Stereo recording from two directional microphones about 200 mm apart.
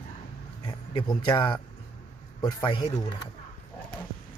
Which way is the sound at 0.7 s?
20° left (ahead or behind).